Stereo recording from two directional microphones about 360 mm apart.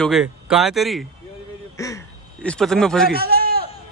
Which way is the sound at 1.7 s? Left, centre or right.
Centre.